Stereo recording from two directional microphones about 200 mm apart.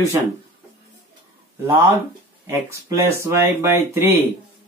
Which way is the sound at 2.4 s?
15° right (ahead or behind).